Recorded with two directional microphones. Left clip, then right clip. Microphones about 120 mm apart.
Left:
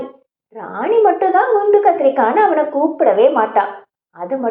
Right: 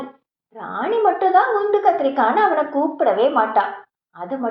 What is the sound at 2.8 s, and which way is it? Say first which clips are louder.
Speech: left 4 dB; 10° right (ahead or behind).